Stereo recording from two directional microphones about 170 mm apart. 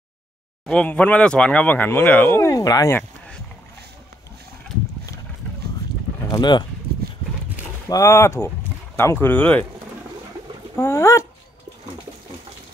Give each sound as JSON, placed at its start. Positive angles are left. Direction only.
{"t": 0.7, "sound": "speech", "side_deg": 5}
{"t": 6.2, "sound": "speech", "side_deg": 25}
{"t": 7.9, "sound": "speech", "side_deg": 15}
{"t": 10.8, "sound": "speech", "side_deg": 15}